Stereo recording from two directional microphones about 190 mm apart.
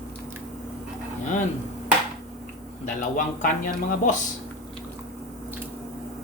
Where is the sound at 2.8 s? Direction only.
40° left (ahead or behind).